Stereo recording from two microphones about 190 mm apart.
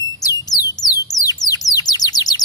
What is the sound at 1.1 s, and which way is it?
Bird, 20° left (ahead or behind).